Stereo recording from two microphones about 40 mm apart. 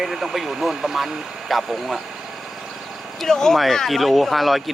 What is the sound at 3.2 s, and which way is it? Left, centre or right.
Speech, centre.